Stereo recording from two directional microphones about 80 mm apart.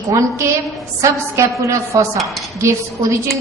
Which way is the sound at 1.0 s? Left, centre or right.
Right.